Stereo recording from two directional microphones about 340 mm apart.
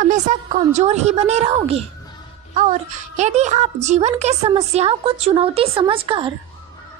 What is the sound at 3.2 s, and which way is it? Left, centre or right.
A woman's voice, centre.